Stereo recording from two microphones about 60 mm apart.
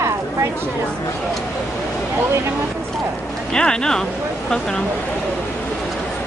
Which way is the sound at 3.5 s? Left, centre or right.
Centre.